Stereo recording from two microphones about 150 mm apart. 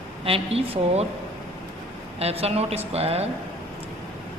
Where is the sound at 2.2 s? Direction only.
45° right (ahead or behind).